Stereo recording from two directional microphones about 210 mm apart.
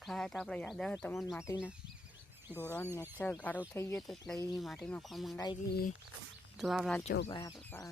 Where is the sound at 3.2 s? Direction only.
10° left (ahead or behind).